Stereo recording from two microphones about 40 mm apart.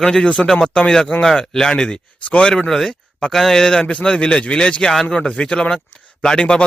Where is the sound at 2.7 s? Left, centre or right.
Centre.